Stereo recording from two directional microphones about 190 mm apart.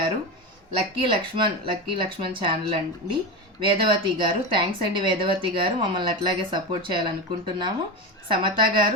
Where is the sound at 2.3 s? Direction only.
25° right (ahead or behind).